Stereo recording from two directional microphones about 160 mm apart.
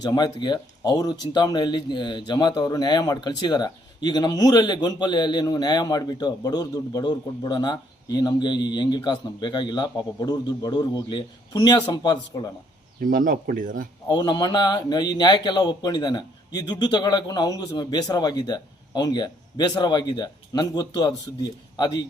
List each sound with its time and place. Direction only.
0.0 s speech: 25° left (ahead or behind)
13.0 s speech: 60° right (ahead or behind)
14.1 s speech: 30° left (ahead or behind)